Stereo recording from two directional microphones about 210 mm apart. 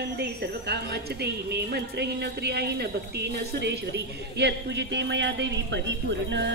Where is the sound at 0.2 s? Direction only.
50° right (ahead or behind).